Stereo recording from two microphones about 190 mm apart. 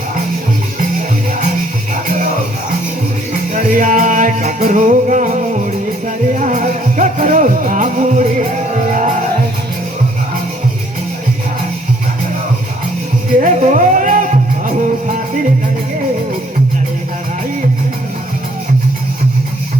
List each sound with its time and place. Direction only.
3.5 s music: 45° right (ahead or behind)
13.4 s music: 40° right (ahead or behind)